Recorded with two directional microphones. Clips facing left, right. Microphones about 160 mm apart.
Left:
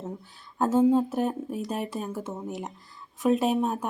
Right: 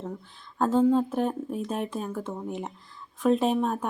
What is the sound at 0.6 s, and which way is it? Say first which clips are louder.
A woman's voice: left 1 dB; 10° left (ahead or behind).